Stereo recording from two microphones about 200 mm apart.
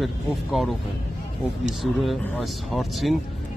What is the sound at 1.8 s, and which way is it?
Speech, centre (ahead or behind).